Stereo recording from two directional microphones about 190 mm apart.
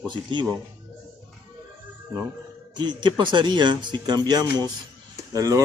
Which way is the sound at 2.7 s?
20° right (ahead or behind).